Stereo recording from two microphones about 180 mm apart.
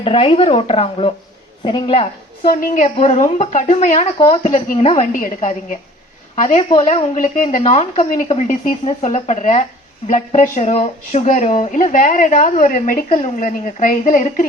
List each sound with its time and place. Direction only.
0.0 s a woman's voice: 30° left (ahead or behind)
2.5 s speech: 50° left (ahead or behind)